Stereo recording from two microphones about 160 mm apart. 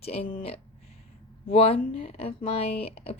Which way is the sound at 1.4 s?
35° left (ahead or behind).